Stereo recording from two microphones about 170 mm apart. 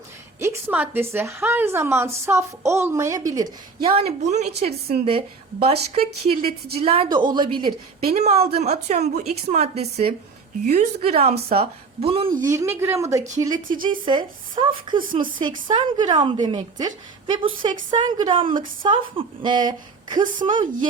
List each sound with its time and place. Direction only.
0.3 s a woman's voice: 10° right (ahead or behind)
3.8 s a woman's voice: 35° right (ahead or behind)
8.1 s a woman's voice: 40° right (ahead or behind)
12.4 s a woman's voice: 15° right (ahead or behind)
14.0 s a woman's voice: 30° right (ahead or behind)